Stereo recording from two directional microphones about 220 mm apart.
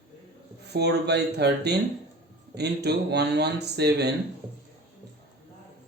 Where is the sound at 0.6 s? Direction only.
50° right (ahead or behind).